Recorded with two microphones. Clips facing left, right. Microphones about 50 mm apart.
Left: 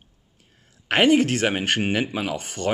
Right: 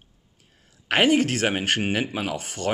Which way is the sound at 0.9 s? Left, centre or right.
Centre.